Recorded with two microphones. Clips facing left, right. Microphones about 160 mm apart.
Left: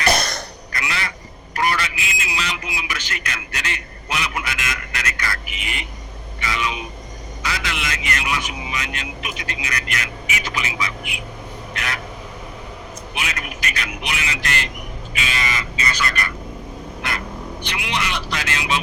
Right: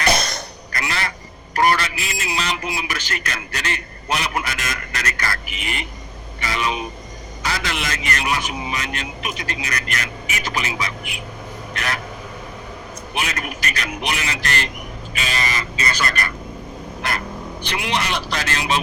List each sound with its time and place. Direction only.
0.8 s quack: 40° right (ahead or behind)
1.5 s a man's voice: 35° right (ahead or behind)
11.7 s a sound: 40° right (ahead or behind)
13.1 s speech: 40° right (ahead or behind)